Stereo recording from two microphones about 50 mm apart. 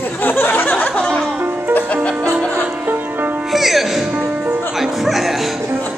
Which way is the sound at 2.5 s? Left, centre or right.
Right.